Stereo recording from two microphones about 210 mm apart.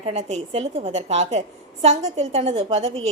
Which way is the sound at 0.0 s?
30° right (ahead or behind).